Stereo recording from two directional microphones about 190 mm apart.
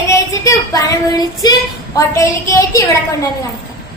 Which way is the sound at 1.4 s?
20° left (ahead or behind).